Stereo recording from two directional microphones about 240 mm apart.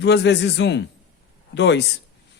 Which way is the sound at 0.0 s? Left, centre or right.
Left.